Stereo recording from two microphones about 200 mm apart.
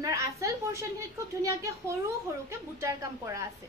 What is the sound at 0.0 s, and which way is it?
Speech, 15° right (ahead or behind).